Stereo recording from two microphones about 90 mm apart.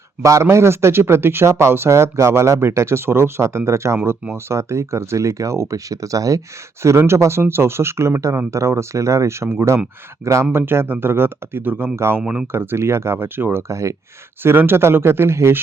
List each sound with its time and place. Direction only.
0.2 s speech: 35° right (ahead or behind)
12.2 s speech: 10° right (ahead or behind)
12.5 s speech: 25° right (ahead or behind)